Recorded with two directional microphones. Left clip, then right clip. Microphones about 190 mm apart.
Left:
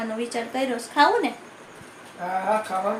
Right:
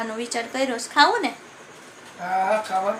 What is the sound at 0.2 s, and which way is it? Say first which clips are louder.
A woman's voice: right 2 dB; 10° right (ahead or behind).